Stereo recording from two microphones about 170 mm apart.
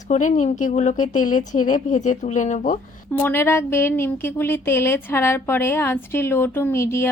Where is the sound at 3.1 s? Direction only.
10° left (ahead or behind).